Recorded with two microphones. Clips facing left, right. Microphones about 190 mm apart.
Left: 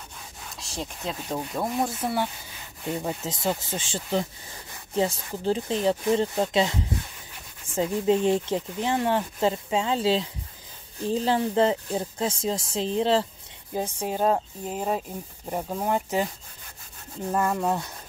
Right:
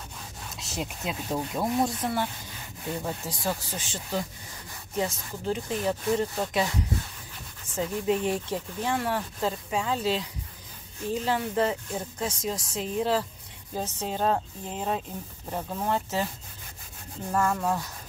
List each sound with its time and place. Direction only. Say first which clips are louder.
0.6 s speech: right 1 dB; 5° right (ahead or behind); by 13.3 s 25° left (ahead or behind)
13.7 s speech: left 3 dB; 10° left (ahead or behind)
17.3 s speech: left 1 dB; 15° left (ahead or behind)